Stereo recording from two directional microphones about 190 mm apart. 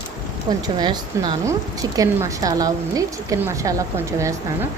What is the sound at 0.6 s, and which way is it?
Speech, 20° right (ahead or behind).